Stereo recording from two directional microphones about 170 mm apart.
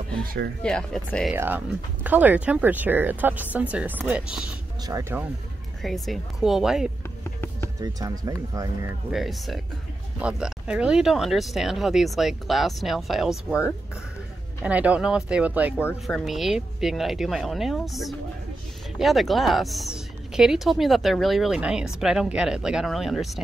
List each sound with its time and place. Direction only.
0.6 s speech: 5° left (ahead or behind)
1.3 s speech: 10° right (ahead or behind)
5.8 s speech: centre (ahead or behind)
7.8 s speech: 20° right (ahead or behind)
9.1 s speech: centre (ahead or behind)